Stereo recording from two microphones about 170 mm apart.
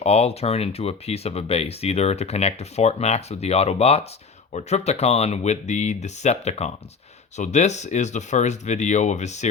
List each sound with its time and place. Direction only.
0.0 s speech: 40° left (ahead or behind)